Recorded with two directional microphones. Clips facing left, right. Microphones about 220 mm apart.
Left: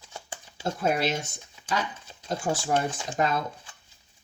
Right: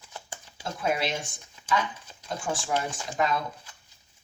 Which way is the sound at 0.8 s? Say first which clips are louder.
Left 2 dB; 40° left (ahead or behind).